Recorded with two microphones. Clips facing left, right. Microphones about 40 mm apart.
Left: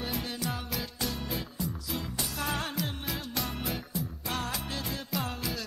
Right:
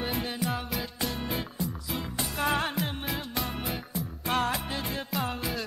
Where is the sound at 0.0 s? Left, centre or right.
Right.